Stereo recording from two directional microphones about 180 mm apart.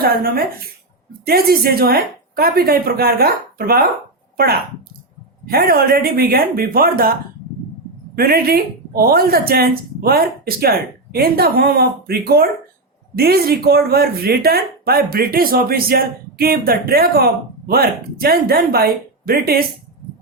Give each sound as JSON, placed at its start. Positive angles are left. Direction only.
{"t": 0.0, "sound": "speech", "side_deg": -55}
{"t": 5.5, "sound": "speech", "side_deg": -55}
{"t": 8.1, "sound": "speech", "side_deg": -55}